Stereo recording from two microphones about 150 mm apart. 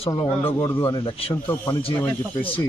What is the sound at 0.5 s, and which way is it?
Speech, 20° left (ahead or behind).